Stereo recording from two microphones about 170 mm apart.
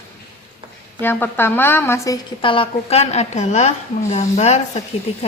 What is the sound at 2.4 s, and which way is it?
A woman's voice, 30° left (ahead or behind).